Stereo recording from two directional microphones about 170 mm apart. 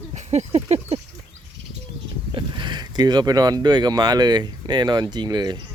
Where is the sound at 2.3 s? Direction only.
25° right (ahead or behind).